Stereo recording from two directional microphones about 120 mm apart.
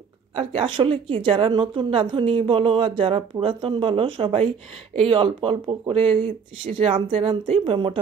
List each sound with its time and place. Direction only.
0.4 s a woman's voice: 50° right (ahead or behind)